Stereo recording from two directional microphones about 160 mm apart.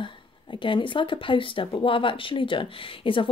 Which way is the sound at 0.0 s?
30° left (ahead or behind).